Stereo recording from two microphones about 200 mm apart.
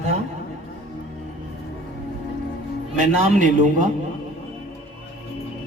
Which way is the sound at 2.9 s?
35° right (ahead or behind).